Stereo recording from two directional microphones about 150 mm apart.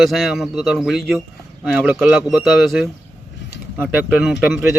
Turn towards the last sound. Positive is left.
turn(degrees=-5)  # may be behind; listen again after turning